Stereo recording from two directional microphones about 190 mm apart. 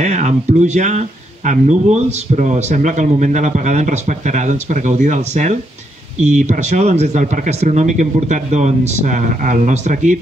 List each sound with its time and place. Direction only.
0.0 s speech: 40° right (ahead or behind)